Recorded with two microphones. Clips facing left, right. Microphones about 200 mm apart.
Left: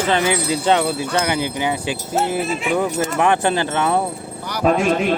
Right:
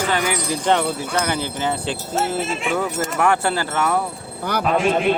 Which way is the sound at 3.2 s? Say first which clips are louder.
Left 2 dB; 20° left (ahead or behind).